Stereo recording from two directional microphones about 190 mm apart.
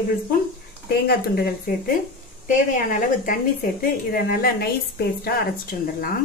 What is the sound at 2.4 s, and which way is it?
Speech, 45° left (ahead or behind).